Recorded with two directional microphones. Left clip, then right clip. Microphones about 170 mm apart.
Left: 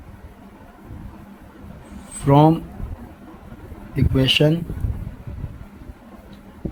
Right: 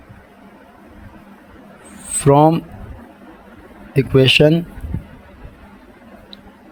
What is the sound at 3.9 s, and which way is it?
Speech, 60° right (ahead or behind).